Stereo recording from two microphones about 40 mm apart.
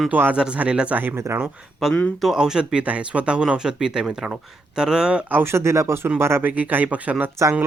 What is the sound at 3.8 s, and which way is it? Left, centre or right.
Speech, centre.